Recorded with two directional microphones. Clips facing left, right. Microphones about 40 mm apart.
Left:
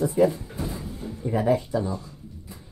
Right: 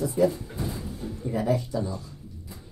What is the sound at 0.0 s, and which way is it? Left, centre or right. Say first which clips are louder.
Speech: left 3 dB; left.